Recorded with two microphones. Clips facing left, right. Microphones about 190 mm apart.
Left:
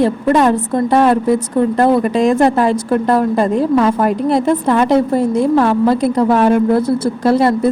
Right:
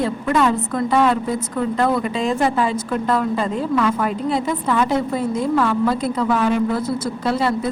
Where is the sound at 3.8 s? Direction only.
40° left (ahead or behind).